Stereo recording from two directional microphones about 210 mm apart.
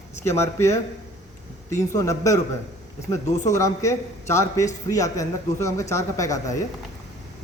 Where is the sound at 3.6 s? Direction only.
15° left (ahead or behind).